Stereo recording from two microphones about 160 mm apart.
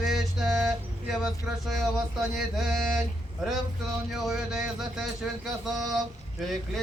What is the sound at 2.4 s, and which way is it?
Speech, centre (ahead or behind).